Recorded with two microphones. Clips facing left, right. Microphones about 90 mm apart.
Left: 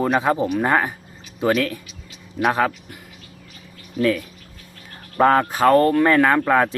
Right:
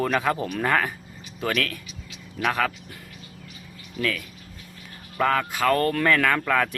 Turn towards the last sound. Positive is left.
turn(degrees=30)  # may be behind; listen again after turning